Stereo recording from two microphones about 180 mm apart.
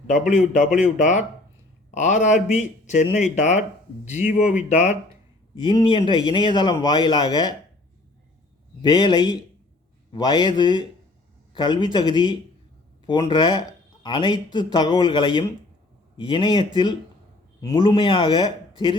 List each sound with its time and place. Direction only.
0.1 s a man's voice: 45° left (ahead or behind)
5.5 s a man's voice: 25° left (ahead or behind)
8.8 s a man's voice: 25° left (ahead or behind)